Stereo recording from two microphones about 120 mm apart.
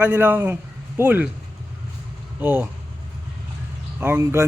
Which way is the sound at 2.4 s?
15° right (ahead or behind).